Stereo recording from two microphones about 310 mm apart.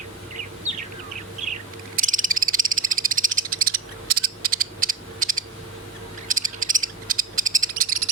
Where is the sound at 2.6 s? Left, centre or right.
Right.